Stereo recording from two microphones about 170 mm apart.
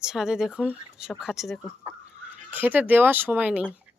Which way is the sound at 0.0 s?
5° right (ahead or behind).